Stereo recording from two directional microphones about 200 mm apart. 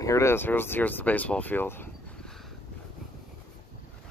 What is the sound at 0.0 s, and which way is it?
Speech, 15° left (ahead or behind).